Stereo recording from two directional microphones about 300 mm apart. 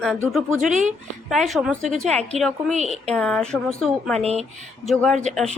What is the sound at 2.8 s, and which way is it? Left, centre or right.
Speech, right.